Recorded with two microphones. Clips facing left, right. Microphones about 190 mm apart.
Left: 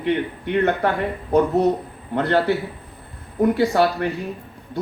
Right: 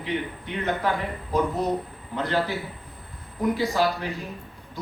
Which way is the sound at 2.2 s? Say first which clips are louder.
Left 7 dB; 65° left (ahead or behind).